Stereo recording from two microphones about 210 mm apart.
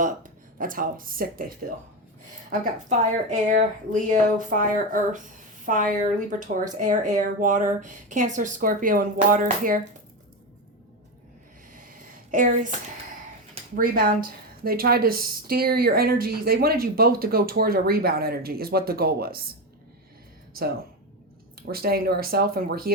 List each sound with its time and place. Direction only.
0.0 s speech: 40° right (ahead or behind)
2.5 s speech: 35° right (ahead or behind)
11.7 s a sound: 40° right (ahead or behind)
13.7 s a woman's voice: 45° right (ahead or behind)
20.6 s a woman's voice: 45° right (ahead or behind)